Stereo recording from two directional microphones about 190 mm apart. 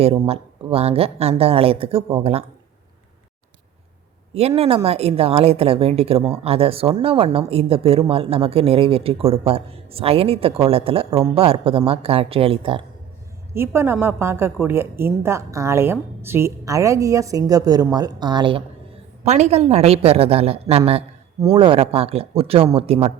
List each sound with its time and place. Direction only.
0.0 s speech: 30° right (ahead or behind)
4.4 s a woman's voice: 30° right (ahead or behind)
13.5 s a woman's voice: 10° right (ahead or behind)
19.2 s speech: 35° right (ahead or behind)